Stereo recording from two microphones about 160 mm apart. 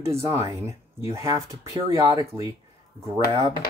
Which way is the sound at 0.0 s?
15° right (ahead or behind).